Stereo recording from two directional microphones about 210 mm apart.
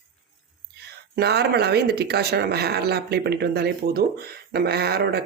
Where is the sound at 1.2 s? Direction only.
50° right (ahead or behind).